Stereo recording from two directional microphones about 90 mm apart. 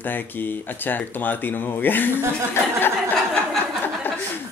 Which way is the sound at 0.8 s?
20° left (ahead or behind).